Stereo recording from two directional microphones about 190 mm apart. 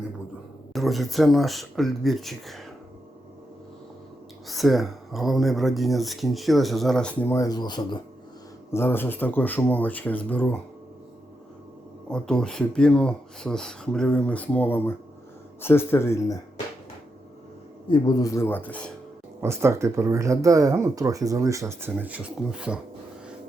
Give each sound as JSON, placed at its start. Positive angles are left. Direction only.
{"t": 0.7, "sound": "speech", "side_deg": 0}
{"t": 4.4, "sound": "speech", "side_deg": 0}
{"t": 8.7, "sound": "speech", "side_deg": 10}
{"t": 12.1, "sound": "speech", "side_deg": 5}
{"t": 17.8, "sound": "speech", "side_deg": 25}
{"t": 19.4, "sound": "speech", "side_deg": -15}